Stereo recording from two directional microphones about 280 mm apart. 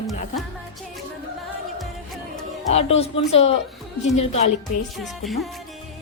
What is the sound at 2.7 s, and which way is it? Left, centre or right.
A woman's voice, left.